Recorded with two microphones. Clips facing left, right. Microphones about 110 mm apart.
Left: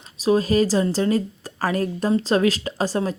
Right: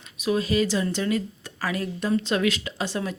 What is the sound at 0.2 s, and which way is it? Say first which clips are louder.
A woman's voice: left 5 dB; 35° left (ahead or behind).